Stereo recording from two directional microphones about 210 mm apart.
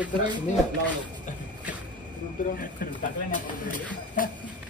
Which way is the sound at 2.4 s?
40° left (ahead or behind).